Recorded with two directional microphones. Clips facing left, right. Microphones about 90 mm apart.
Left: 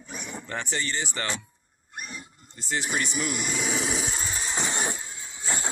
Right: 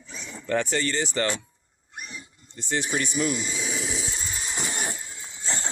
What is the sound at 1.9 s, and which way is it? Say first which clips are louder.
Pig: left 1 dB; 45° left (ahead or behind).